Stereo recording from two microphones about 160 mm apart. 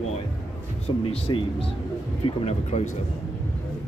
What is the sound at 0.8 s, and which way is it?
Speech, 40° left (ahead or behind).